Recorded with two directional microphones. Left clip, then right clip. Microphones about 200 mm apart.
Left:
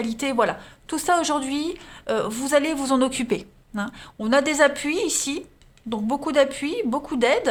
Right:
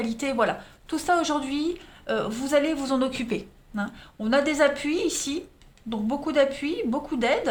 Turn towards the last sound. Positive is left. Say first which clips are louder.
# left 4 dB
turn(degrees=45)  # may be behind; listen again after turning